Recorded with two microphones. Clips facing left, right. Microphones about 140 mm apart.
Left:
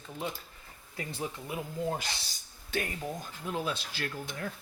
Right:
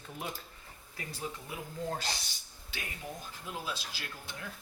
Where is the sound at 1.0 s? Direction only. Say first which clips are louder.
Left 6 dB; 30° left (ahead or behind).